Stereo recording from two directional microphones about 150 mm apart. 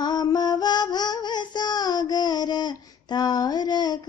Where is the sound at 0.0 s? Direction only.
30° left (ahead or behind).